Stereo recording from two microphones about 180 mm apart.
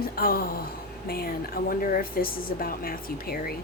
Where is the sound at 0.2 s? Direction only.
55° left (ahead or behind).